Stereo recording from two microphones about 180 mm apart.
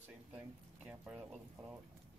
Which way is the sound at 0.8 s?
5° right (ahead or behind).